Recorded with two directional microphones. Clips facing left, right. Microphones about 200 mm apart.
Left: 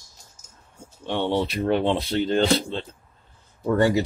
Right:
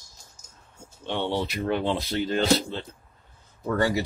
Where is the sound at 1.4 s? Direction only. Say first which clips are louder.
Left 4 dB; 30° left (ahead or behind).